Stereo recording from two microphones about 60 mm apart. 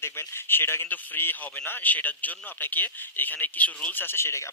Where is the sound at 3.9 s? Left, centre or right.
Left.